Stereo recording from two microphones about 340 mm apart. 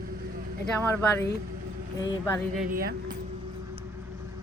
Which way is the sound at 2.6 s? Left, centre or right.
Right.